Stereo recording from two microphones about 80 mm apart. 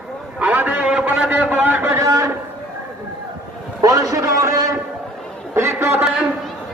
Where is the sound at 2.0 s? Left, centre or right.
Right.